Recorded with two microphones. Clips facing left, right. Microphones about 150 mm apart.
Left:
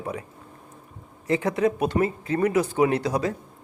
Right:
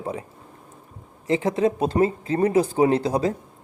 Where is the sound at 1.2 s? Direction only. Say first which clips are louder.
Right 2 dB; 25° right (ahead or behind).